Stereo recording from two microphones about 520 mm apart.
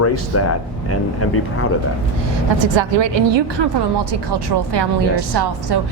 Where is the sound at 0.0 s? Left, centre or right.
Left.